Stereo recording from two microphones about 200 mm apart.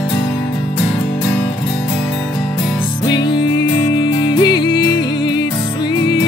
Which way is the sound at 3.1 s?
20° left (ahead or behind).